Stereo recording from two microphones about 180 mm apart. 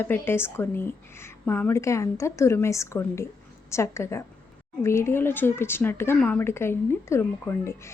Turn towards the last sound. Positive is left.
turn(degrees=15)  # may be behind; listen again after turning